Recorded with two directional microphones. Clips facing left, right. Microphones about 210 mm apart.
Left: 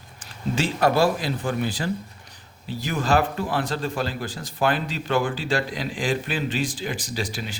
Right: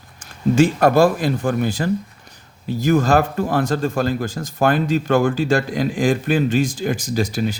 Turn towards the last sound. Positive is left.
turn(degrees=-45)  # may be behind; listen again after turning